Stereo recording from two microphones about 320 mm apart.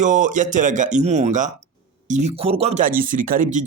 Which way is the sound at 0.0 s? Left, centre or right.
Right.